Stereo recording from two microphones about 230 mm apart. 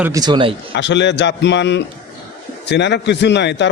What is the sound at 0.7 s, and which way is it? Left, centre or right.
A man's voice, left.